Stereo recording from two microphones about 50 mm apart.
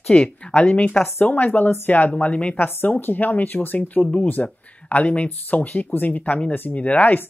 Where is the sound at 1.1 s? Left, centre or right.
Left.